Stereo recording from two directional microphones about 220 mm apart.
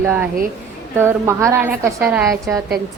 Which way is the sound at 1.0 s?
10° right (ahead or behind).